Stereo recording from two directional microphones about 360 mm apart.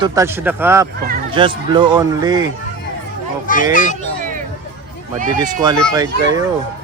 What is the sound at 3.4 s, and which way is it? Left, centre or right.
Speech, left.